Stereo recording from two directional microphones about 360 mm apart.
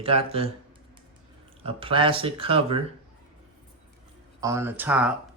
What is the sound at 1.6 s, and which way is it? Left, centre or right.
Speech, centre.